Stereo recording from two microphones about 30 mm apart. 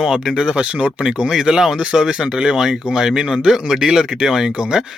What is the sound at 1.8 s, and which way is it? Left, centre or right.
Speech, right.